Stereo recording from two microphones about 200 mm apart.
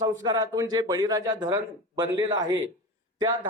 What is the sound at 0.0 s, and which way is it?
Speech, 20° right (ahead or behind).